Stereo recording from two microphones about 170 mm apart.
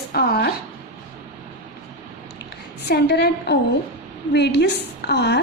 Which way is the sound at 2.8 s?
75° left (ahead or behind).